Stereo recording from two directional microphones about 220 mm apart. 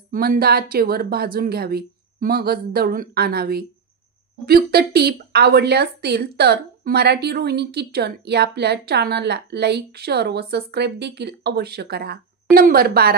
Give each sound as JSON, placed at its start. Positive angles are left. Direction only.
{"t": 0.1, "sound": "a woman's voice", "side_deg": -40}